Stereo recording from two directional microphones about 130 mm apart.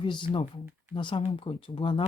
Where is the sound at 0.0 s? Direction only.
40° left (ahead or behind).